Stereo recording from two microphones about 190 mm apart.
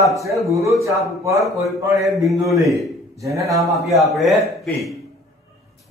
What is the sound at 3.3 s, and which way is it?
Speech, 15° right (ahead or behind).